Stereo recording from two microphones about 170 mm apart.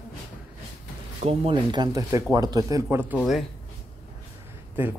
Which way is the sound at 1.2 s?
35° right (ahead or behind).